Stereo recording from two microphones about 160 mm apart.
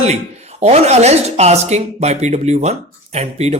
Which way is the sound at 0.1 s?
40° right (ahead or behind).